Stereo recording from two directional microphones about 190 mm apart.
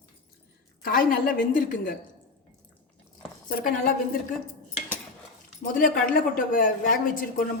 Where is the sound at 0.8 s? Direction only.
45° left (ahead or behind).